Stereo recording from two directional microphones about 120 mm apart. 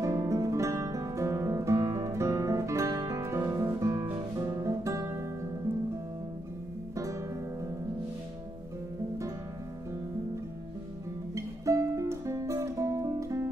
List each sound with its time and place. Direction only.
0.0 s music: 25° right (ahead or behind)
11.3 s music: 25° right (ahead or behind)